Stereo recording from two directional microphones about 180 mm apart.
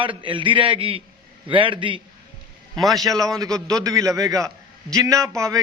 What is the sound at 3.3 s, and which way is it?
A man's voice, 20° right (ahead or behind).